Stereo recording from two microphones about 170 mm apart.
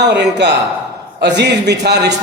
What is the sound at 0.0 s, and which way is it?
Speech, 90° right.